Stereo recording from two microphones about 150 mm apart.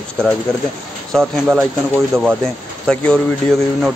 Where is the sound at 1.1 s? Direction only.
Centre (ahead or behind).